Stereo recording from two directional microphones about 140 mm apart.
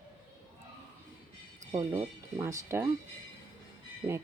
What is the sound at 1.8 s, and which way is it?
Speech, 25° right (ahead or behind).